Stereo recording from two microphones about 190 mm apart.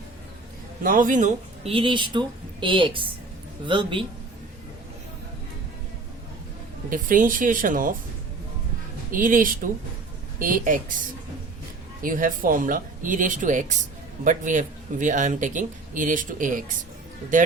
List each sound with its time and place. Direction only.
0.8 s speech: 45° right (ahead or behind); by 4.0 s 25° right (ahead or behind)
6.9 s speech: 45° right (ahead or behind)
9.1 s speech: 45° right (ahead or behind)
12.0 s speech: 45° right (ahead or behind)